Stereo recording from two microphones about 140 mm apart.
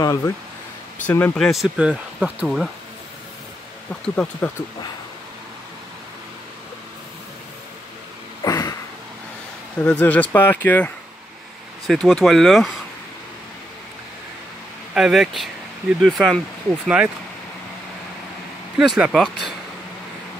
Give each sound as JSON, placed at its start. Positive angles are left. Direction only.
{"t": 0.0, "sound": "speech", "side_deg": 25}
{"t": 1.0, "sound": "speech", "side_deg": 10}
{"t": 4.1, "sound": "speech", "side_deg": 10}
{"t": 8.5, "sound": "a sound", "side_deg": 25}
{"t": 9.8, "sound": "speech", "side_deg": 10}
{"t": 11.9, "sound": "speech", "side_deg": 0}
{"t": 15.0, "sound": "speech", "side_deg": 0}
{"t": 18.8, "sound": "speech", "side_deg": -5}